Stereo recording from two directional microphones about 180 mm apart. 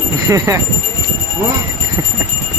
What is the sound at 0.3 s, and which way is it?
Speech, 20° right (ahead or behind).